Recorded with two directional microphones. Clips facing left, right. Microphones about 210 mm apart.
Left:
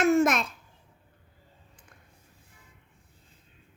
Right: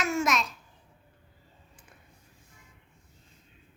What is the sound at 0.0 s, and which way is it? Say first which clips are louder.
Babbling: left 6 dB; 55° left (ahead or behind).